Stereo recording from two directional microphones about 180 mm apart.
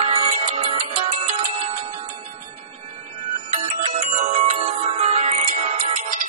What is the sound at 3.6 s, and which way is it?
Music, 35° right (ahead or behind).